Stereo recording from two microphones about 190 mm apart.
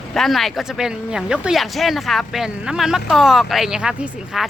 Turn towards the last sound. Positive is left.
turn(degrees=-5)  # may be behind; listen again after turning